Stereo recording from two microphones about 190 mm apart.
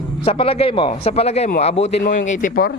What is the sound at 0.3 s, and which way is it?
A man's voice, 30° left (ahead or behind).